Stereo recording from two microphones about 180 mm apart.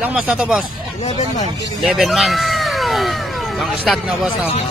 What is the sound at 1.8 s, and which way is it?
Speech, centre (ahead or behind).